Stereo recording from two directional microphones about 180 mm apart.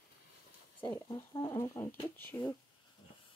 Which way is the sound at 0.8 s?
25° left (ahead or behind).